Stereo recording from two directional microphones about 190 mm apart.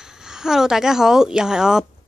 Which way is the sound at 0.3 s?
5° right (ahead or behind).